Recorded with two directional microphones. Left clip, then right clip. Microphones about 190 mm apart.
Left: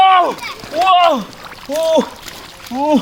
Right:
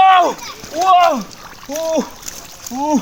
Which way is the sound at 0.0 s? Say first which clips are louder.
Even; 15° left (ahead or behind).